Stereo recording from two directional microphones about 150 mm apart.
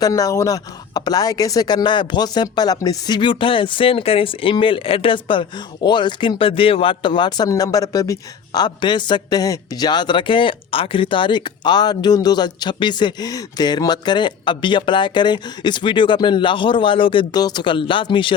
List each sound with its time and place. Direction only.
0.0 s speech: 25° left (ahead or behind)